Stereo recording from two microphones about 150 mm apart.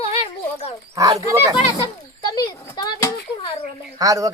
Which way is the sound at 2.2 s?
30° left (ahead or behind).